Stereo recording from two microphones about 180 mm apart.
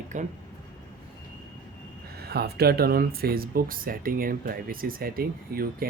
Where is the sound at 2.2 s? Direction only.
60° right (ahead or behind).